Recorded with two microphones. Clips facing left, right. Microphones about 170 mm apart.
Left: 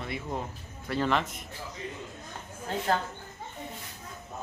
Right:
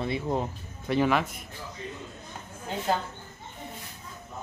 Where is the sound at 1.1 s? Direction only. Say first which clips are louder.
Right 2 dB; 5° right (ahead or behind).